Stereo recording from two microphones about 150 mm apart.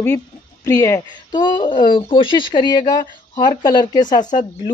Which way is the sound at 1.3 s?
30° left (ahead or behind).